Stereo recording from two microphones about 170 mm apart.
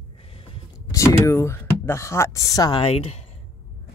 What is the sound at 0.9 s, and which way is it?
Speech, 15° left (ahead or behind).